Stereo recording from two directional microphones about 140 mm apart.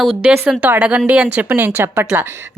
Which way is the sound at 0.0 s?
5° right (ahead or behind).